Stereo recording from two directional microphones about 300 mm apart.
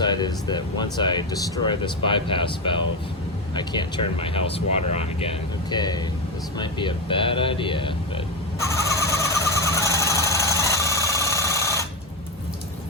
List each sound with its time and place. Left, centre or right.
0.0 s speech: centre
6.6 s a sound: centre
9.7 s engine: centre
11.3 s rub: centre